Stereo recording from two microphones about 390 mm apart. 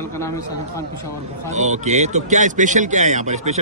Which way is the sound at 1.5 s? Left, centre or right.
Centre.